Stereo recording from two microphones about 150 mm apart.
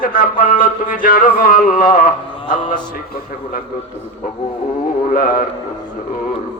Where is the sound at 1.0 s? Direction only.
70° left (ahead or behind).